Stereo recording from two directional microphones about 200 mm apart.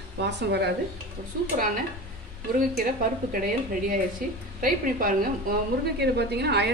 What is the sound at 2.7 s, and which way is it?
Speech, 45° right (ahead or behind).